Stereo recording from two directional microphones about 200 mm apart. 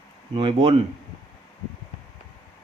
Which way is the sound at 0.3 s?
25° right (ahead or behind).